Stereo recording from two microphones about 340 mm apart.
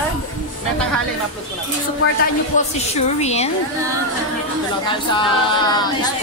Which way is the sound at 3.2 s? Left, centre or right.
Centre.